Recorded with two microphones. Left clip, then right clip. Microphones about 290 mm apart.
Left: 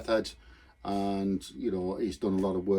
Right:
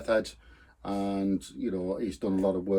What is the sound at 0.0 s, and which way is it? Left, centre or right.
Speech, centre.